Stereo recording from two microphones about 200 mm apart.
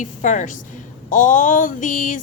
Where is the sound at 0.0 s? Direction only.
40° left (ahead or behind).